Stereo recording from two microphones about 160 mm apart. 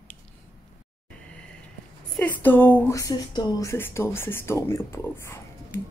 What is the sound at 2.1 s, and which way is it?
Speech, 10° left (ahead or behind).